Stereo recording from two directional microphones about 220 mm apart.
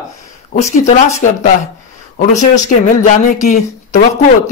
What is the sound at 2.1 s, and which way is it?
Speech, 35° left (ahead or behind).